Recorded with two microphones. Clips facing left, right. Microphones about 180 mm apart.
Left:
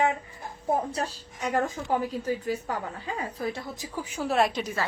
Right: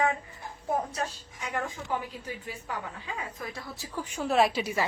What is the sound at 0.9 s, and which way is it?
A woman's voice, 35° left (ahead or behind).